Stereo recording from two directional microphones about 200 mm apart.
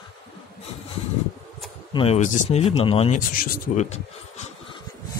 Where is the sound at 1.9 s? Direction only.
30° left (ahead or behind).